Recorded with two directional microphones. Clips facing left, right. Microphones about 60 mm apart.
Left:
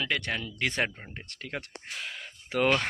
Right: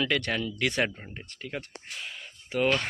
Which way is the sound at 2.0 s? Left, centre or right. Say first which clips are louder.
Left 2 dB; left.